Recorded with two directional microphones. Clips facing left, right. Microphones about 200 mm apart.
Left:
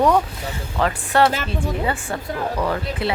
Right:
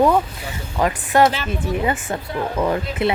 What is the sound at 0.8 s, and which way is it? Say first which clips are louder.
Speech: right 2 dB; 15° right (ahead or behind).